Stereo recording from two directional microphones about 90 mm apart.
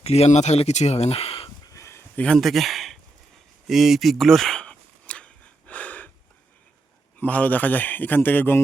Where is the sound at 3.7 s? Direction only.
5° right (ahead or behind); by 6.1 s 15° left (ahead or behind).